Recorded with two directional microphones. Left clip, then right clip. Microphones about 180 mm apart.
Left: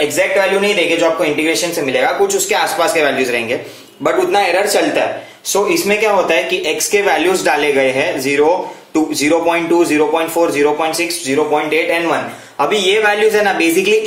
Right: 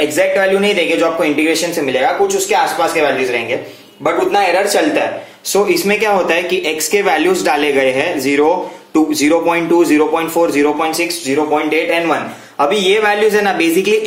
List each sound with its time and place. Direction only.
0.0 s speech: 25° right (ahead or behind)
2.2 s speech: 10° left (ahead or behind)
5.5 s speech: 30° right (ahead or behind)